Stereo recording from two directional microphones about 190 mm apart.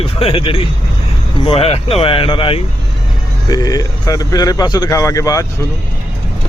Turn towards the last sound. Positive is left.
turn(degrees=15)  # may be behind; listen again after turning